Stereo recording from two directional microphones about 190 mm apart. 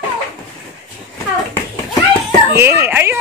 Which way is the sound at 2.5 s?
15° right (ahead or behind).